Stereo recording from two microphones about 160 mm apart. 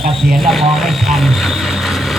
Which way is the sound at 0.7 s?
Centre (ahead or behind).